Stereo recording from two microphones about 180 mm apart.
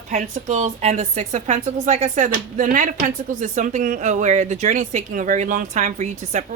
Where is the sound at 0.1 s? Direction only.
40° right (ahead or behind).